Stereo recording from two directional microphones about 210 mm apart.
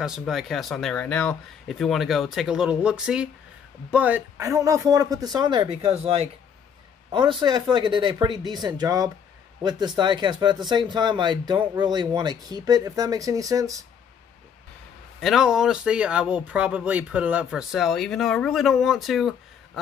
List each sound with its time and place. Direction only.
0.0 s speech: centre (ahead or behind)
15.1 s speech: centre (ahead or behind)